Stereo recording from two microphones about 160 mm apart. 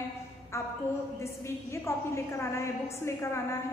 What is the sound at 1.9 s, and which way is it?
A woman's voice, 15° left (ahead or behind).